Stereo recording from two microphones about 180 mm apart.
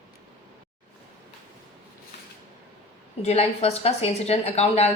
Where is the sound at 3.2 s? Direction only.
35° left (ahead or behind).